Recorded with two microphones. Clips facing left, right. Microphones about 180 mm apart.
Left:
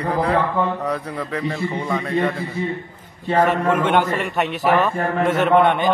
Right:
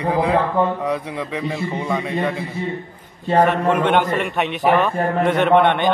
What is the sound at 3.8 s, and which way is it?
A man's voice, 10° left (ahead or behind).